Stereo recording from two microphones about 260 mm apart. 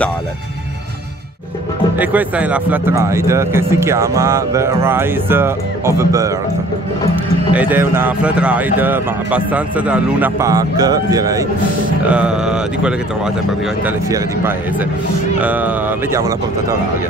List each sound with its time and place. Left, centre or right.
2.0 s speech: centre
7.5 s a man's voice: centre